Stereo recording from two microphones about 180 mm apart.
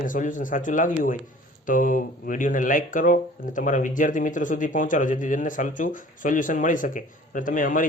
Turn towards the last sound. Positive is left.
turn(degrees=45)  # may be behind; listen again after turning